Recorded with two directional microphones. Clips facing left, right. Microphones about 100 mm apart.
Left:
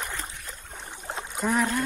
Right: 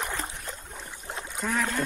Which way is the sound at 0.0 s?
20° right (ahead or behind).